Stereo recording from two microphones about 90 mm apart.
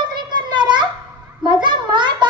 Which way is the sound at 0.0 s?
60° right (ahead or behind).